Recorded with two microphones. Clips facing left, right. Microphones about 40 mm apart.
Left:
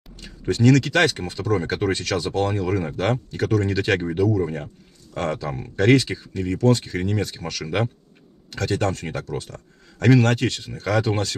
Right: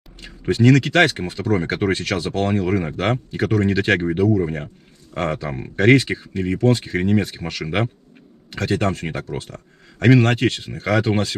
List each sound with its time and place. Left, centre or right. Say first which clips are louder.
0.2 s speech: right 2 dB; right